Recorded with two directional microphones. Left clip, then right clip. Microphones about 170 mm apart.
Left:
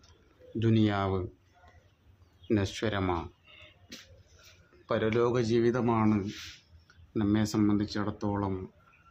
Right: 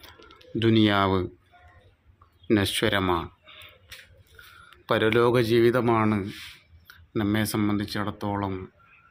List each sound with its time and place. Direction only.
0.6 s speech: 25° right (ahead or behind)
2.5 s speech: 25° right (ahead or behind)
4.9 s speech: 30° right (ahead or behind)
8.4 s speech: 10° right (ahead or behind)